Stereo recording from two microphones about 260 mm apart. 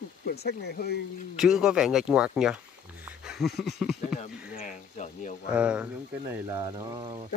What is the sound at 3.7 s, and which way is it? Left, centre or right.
Speech, centre.